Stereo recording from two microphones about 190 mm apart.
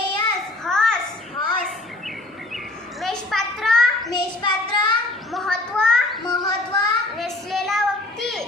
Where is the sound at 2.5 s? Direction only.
Centre (ahead or behind).